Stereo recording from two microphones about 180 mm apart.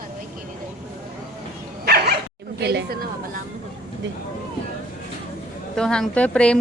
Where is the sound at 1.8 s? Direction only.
60° right (ahead or behind).